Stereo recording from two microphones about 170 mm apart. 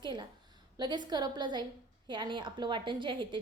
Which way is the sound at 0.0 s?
25° right (ahead or behind).